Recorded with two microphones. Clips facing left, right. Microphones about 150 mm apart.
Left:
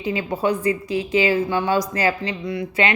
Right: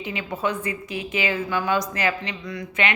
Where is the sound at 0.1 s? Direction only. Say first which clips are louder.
Left 6 dB; 30° left (ahead or behind).